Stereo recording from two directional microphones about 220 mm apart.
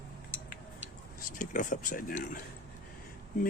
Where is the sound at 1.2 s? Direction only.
35° left (ahead or behind).